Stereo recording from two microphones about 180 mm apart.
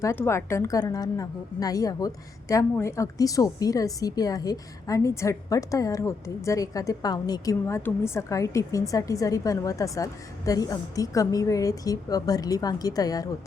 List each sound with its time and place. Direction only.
0.0 s a woman's voice: 15° left (ahead or behind)